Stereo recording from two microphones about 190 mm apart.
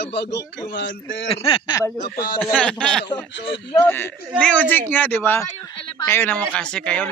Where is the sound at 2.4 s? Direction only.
5° left (ahead or behind).